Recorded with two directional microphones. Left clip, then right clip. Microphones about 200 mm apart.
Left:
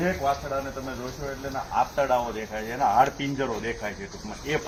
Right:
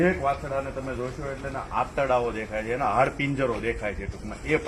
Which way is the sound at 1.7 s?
15° right (ahead or behind).